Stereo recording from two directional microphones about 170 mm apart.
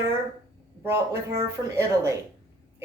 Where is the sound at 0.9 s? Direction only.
15° right (ahead or behind).